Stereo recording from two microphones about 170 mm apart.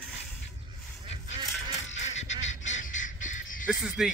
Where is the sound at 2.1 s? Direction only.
40° left (ahead or behind).